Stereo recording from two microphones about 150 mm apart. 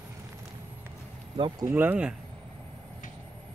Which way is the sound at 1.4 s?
30° right (ahead or behind).